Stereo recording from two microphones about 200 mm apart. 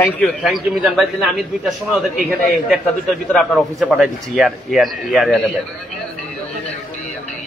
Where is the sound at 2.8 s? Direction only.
5° left (ahead or behind).